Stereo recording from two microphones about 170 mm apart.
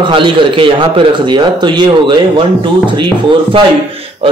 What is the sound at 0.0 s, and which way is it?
Speech, 30° right (ahead or behind).